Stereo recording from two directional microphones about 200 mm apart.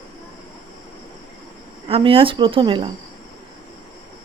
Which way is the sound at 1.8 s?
30° right (ahead or behind).